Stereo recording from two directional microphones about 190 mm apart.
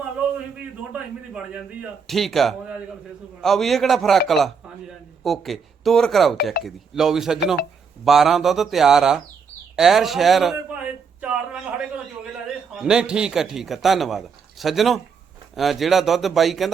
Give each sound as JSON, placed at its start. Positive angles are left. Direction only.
{"t": 0.9, "sound": "speech", "side_deg": -5}
{"t": 11.8, "sound": "a sound", "side_deg": -5}
{"t": 12.7, "sound": "speech", "side_deg": -5}